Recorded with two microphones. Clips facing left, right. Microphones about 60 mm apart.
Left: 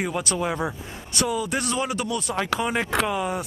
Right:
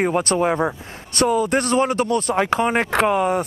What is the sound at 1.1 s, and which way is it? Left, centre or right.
Speech, right.